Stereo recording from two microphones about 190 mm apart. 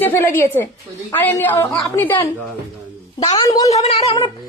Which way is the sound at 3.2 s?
25° left (ahead or behind).